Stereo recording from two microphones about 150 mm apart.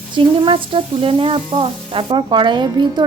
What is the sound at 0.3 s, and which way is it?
Sizzle, 35° right (ahead or behind).